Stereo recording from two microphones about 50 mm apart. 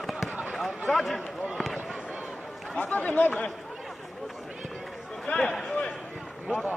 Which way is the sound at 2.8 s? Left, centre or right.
Left.